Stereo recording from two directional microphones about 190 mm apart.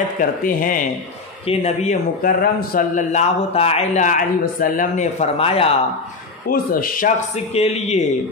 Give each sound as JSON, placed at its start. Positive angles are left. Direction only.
{"t": 0.2, "sound": "speech", "side_deg": 45}
{"t": 1.5, "sound": "speech", "side_deg": 35}
{"t": 3.1, "sound": "speech", "side_deg": 35}
{"t": 6.5, "sound": "speech", "side_deg": 50}
{"t": 7.5, "sound": "speech", "side_deg": 35}